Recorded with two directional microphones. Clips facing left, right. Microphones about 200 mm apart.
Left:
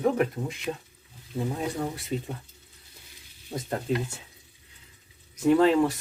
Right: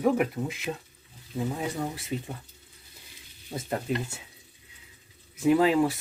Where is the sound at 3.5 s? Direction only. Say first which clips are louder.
Left 1 dB; 5° right (ahead or behind).